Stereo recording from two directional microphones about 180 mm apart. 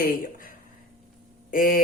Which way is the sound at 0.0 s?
50° left (ahead or behind).